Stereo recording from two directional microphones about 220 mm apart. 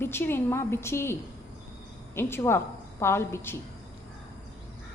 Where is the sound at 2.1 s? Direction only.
10° left (ahead or behind).